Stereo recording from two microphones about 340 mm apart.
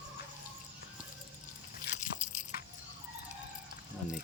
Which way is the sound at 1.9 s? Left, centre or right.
Left.